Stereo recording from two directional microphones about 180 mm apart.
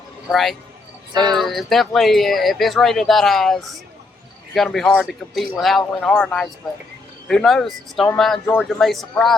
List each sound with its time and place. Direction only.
0.3 s speech: centre (ahead or behind)
1.1 s speech: 25° right (ahead or behind)
1.4 s speech: centre (ahead or behind)